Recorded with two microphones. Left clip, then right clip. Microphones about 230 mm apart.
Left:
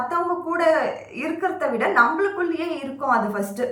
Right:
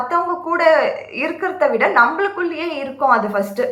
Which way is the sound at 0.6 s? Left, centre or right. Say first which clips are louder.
Right 6 dB; centre.